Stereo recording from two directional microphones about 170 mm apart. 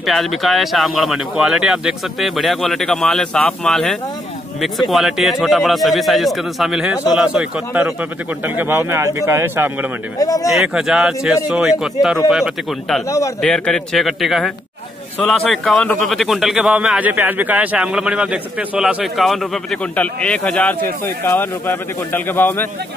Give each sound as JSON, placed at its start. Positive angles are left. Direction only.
{"t": 0.0, "sound": "a man's voice", "side_deg": 0}
{"t": 10.1, "sound": "speech", "side_deg": 20}
{"t": 10.5, "sound": "a man's voice", "side_deg": -5}